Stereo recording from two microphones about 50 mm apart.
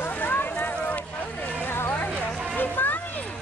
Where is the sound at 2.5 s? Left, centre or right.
Left.